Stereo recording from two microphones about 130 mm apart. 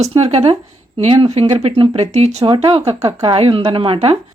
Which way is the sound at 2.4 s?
45° right (ahead or behind).